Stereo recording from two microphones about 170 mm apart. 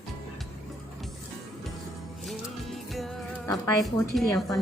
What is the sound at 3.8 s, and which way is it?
Speech, centre (ahead or behind).